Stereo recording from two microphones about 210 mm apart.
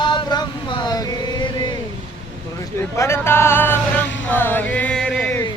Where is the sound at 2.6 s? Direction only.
15° left (ahead or behind).